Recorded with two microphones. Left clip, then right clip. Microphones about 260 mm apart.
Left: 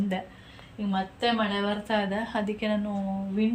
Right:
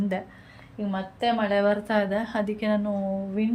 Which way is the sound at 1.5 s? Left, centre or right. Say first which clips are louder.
Right 5 dB; centre.